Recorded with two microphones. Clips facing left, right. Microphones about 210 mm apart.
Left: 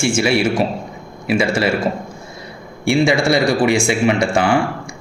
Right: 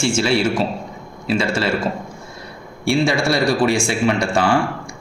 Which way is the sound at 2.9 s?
15° left (ahead or behind).